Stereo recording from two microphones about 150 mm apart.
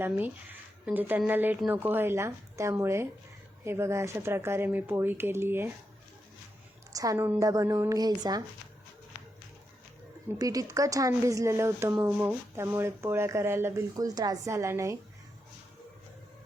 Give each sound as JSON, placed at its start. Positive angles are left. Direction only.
{"t": 0.0, "sound": "speech", "side_deg": -10}
{"t": 6.9, "sound": "speech", "side_deg": -20}
{"t": 10.3, "sound": "speech", "side_deg": -25}